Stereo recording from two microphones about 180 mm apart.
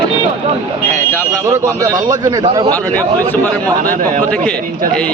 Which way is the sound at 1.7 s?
20° right (ahead or behind).